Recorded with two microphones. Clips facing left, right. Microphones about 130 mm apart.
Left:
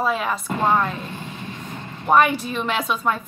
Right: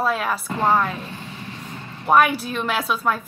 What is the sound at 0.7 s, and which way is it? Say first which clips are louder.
Speech: right 1 dB; 5° right (ahead or behind).